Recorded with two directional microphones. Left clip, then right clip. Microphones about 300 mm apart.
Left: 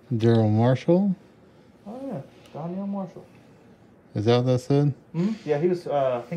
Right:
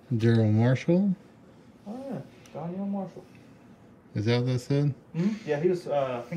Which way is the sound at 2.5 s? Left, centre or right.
Left.